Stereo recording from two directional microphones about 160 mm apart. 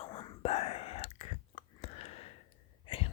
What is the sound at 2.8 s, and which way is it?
Sneeze, 35° left (ahead or behind).